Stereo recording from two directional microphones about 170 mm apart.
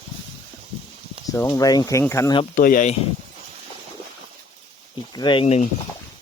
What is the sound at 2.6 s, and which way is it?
Speech, 55° left (ahead or behind).